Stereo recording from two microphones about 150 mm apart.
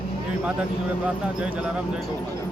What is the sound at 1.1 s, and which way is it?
Speech, 10° right (ahead or behind).